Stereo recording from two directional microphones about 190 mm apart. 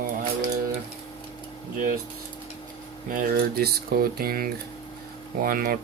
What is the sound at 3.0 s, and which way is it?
Speech, 45° right (ahead or behind).